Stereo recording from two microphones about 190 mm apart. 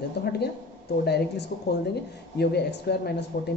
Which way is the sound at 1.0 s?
60° left (ahead or behind).